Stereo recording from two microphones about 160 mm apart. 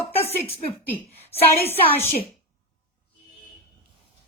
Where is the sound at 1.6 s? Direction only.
10° left (ahead or behind).